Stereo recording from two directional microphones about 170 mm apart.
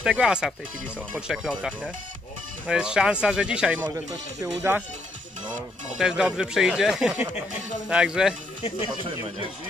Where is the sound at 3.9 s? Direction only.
20° right (ahead or behind).